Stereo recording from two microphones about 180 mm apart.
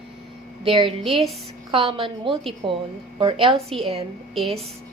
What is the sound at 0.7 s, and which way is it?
A woman's voice, 30° right (ahead or behind).